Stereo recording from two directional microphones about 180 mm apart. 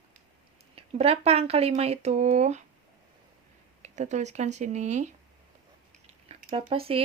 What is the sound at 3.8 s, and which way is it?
Speech, 40° right (ahead or behind).